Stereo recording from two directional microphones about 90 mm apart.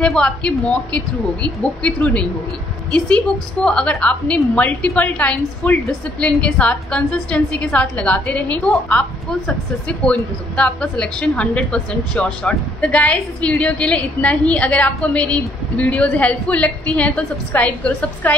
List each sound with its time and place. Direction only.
0.0 s a woman's voice: 5° left (ahead or behind)
3.6 s a woman's voice: 10° left (ahead or behind)